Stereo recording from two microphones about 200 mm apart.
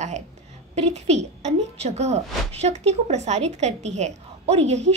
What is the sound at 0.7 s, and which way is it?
A woman's voice, 35° right (ahead or behind).